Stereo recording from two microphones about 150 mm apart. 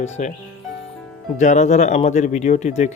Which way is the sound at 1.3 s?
50° left (ahead or behind).